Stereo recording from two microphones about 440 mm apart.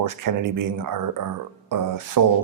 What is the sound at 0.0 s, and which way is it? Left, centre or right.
Speech, right.